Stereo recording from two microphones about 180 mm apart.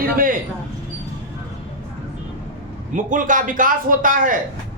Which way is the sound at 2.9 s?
45° right (ahead or behind).